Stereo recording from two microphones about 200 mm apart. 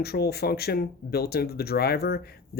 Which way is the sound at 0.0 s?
55° left (ahead or behind).